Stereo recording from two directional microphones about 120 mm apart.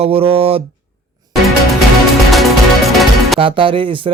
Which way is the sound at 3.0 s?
Centre (ahead or behind).